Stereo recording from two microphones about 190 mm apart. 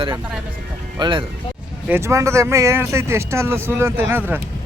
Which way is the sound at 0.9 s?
25° right (ahead or behind).